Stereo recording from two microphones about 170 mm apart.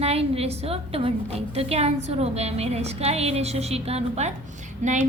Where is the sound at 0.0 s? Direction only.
35° right (ahead or behind).